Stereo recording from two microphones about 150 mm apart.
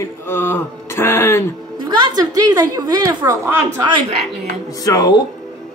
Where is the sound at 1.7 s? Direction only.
30° right (ahead or behind).